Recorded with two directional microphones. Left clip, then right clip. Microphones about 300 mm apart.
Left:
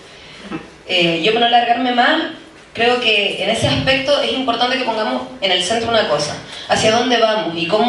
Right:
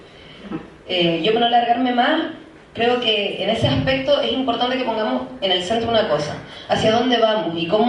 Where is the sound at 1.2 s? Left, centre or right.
Centre.